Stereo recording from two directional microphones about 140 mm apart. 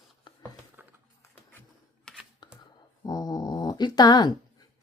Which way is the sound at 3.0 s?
30° left (ahead or behind).